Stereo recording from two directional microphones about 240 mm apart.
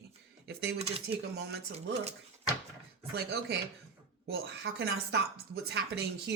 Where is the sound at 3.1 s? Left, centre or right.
Right.